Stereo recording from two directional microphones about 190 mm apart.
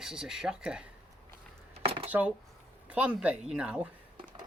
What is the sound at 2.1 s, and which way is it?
Speech, 10° right (ahead or behind).